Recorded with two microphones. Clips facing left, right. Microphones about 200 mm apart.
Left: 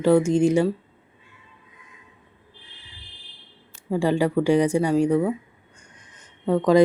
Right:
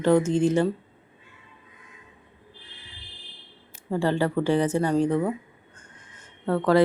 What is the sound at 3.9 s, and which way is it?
A woman's voice, 10° left (ahead or behind).